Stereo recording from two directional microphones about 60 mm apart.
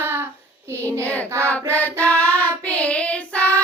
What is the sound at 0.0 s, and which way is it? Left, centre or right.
Child singing, right.